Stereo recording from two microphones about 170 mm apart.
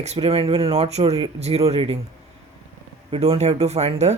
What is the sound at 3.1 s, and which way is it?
Speech, 35° right (ahead or behind).